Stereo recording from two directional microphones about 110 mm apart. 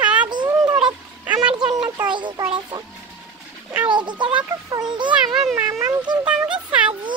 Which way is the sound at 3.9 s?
45° right (ahead or behind).